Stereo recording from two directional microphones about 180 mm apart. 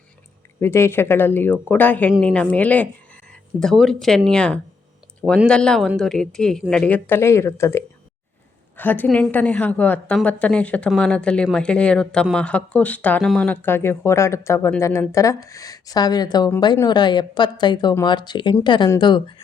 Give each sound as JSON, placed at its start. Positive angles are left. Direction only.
{"t": 0.6, "sound": "a woman's voice", "side_deg": 15}